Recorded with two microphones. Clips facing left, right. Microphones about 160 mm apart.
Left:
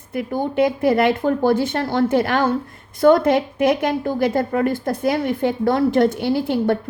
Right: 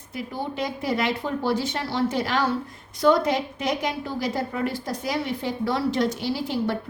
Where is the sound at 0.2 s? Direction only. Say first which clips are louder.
Left 10 dB; 55° left (ahead or behind).